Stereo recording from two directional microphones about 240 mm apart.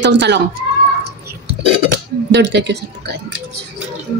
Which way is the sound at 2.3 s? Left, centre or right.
Right.